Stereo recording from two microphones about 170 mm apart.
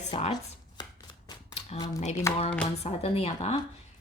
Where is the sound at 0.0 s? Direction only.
40° left (ahead or behind).